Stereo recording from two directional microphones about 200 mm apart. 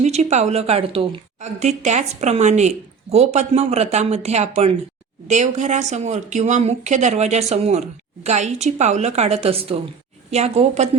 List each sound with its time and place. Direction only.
0.0 s a woman's voice: 35° right (ahead or behind)